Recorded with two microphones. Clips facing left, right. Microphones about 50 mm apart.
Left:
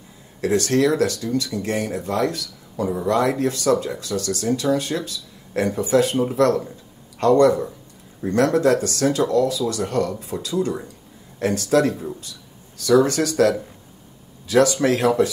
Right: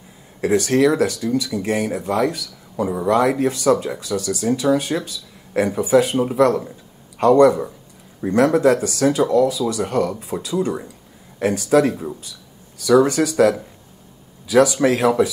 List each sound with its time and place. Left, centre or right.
0.4 s speech: centre